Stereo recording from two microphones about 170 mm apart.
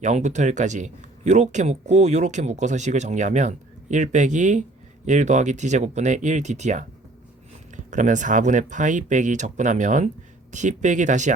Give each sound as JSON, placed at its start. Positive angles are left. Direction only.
{"t": 0.0, "sound": "speech", "side_deg": -45}
{"t": 7.9, "sound": "speech", "side_deg": -45}